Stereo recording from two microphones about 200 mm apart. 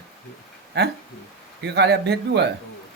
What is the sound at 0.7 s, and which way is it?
A man's voice, 55° right (ahead or behind).